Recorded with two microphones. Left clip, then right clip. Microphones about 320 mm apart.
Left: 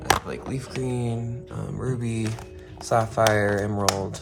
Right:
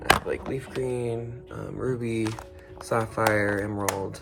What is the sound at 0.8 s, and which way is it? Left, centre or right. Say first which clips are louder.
Speech: right 1 dB; left.